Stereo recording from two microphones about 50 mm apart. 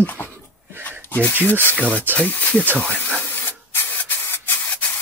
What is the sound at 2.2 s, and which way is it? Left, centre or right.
Speech, left.